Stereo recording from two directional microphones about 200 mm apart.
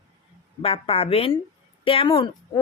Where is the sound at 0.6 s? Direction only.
30° left (ahead or behind).